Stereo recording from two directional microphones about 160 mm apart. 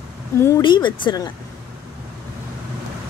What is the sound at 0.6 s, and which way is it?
Speech, 30° left (ahead or behind).